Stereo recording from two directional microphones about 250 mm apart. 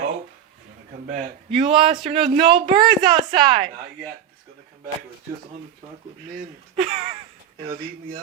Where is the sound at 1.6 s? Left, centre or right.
Right.